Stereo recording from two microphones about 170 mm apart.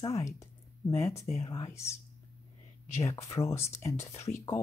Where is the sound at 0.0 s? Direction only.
20° left (ahead or behind).